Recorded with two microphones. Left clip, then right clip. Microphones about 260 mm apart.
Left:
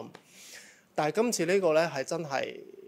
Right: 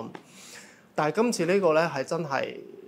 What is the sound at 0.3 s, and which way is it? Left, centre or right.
Speech, left.